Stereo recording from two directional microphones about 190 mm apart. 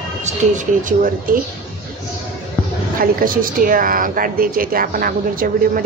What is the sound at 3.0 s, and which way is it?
A woman's voice, 45° right (ahead or behind).